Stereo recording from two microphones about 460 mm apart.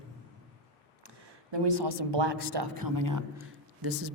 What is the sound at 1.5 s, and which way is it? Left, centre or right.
A woman's voice, right.